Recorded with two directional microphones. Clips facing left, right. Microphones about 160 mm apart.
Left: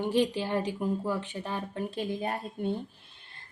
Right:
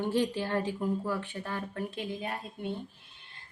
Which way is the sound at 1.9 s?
40° left (ahead or behind).